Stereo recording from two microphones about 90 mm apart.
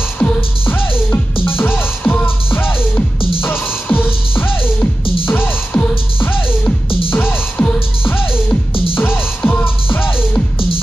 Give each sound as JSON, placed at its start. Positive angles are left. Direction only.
{"t": 0.2, "sound": "music", "side_deg": 20}